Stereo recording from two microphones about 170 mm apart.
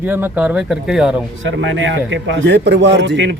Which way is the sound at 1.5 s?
90° right.